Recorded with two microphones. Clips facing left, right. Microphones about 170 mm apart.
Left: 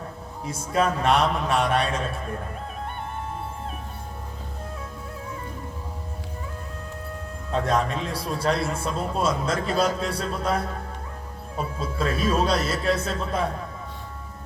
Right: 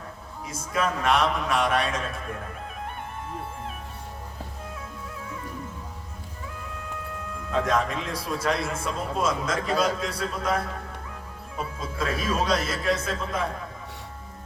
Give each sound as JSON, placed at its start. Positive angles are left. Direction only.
{"t": 0.4, "sound": "a man's voice", "side_deg": 30}
{"t": 7.5, "sound": "a man's voice", "side_deg": 35}